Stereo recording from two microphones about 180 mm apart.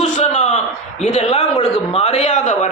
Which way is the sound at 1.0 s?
40° left (ahead or behind).